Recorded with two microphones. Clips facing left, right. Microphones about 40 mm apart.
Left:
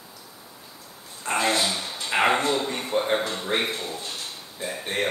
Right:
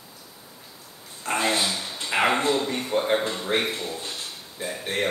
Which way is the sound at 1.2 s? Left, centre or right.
Centre.